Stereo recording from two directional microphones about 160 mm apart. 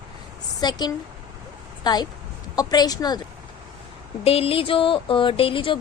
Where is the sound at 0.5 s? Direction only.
25° left (ahead or behind).